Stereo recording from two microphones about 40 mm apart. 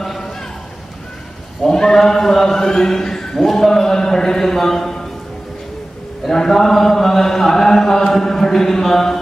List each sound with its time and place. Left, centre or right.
0.0 s a sound: centre
1.7 s speech: centre
6.2 s mantra: centre